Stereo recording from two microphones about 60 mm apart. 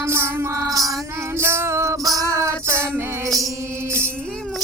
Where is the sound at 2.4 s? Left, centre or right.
Right.